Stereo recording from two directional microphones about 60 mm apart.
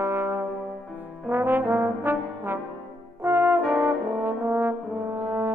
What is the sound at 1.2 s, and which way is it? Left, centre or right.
Brass instrument, right.